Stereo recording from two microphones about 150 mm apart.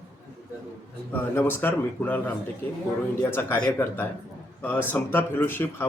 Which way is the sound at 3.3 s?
15° left (ahead or behind).